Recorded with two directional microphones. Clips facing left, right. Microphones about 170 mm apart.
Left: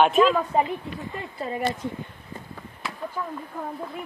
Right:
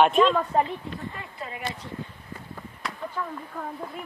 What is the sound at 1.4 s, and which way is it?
Speech, 40° left (ahead or behind).